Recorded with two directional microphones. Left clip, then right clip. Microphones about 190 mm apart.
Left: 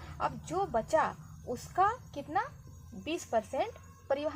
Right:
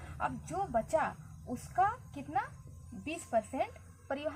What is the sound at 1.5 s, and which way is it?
A woman's voice, 50° left (ahead or behind).